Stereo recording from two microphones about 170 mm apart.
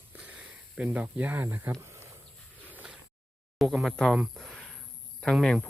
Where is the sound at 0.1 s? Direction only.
10° right (ahead or behind).